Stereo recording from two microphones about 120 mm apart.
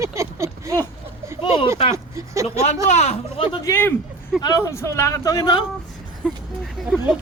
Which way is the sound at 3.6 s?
20° left (ahead or behind).